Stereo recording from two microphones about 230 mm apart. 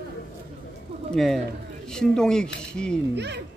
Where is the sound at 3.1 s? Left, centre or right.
Right.